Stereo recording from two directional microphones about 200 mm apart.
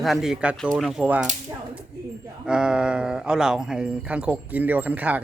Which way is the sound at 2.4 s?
5° right (ahead or behind).